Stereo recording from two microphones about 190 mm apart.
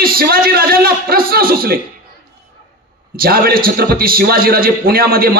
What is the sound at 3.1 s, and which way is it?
A man's voice, 50° right (ahead or behind).